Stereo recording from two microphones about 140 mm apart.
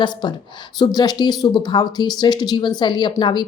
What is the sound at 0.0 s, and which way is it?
Speech, 30° left (ahead or behind).